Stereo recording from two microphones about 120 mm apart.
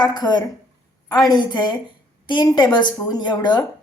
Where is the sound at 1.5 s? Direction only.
40° left (ahead or behind).